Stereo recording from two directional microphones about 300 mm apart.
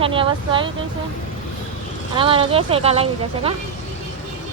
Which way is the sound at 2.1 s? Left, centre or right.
Centre.